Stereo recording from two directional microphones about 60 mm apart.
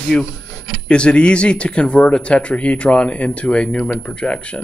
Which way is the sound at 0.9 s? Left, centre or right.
Centre.